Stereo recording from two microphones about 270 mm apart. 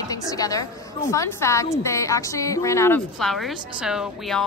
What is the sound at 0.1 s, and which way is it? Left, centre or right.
A woman's voice, centre.